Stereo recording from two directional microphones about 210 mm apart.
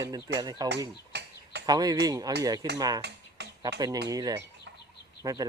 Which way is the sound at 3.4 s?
55° right (ahead or behind).